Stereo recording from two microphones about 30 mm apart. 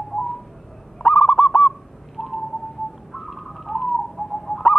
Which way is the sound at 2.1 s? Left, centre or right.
Centre.